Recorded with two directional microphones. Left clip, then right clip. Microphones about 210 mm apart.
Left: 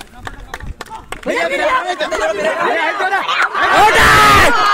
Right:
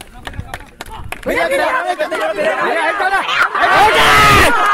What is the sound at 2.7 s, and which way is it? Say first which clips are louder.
Speech: right 1 dB; 20° right (ahead or behind).